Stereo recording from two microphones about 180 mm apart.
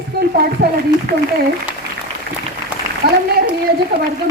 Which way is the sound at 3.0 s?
60° right (ahead or behind).